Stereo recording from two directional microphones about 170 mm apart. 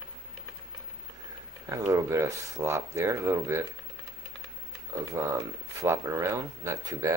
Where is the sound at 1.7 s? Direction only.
20° right (ahead or behind).